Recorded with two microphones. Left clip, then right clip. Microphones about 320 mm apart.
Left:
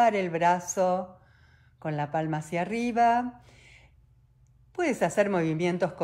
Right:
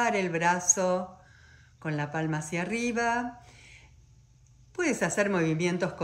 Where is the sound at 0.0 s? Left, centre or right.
Centre.